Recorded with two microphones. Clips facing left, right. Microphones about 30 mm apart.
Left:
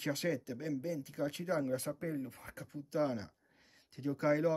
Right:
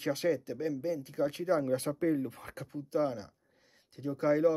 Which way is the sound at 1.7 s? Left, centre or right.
Right.